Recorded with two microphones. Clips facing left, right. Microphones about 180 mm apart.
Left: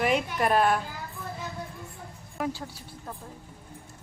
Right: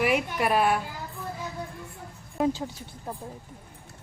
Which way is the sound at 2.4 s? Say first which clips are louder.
Right 6 dB; 20° right (ahead or behind).